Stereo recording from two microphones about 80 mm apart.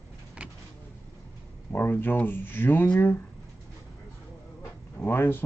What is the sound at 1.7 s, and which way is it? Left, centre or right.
Speech, left.